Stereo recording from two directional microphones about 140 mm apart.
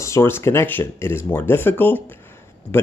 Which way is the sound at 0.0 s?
20° left (ahead or behind).